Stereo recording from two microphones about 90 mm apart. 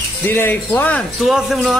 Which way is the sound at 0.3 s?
25° left (ahead or behind).